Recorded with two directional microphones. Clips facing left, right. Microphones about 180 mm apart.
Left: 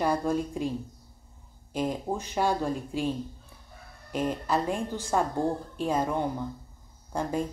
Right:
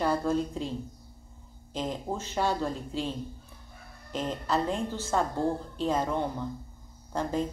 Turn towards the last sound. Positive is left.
turn(degrees=10)  # may be behind; listen again after turning